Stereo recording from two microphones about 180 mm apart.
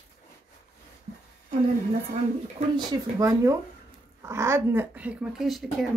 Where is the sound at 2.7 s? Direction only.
20° right (ahead or behind).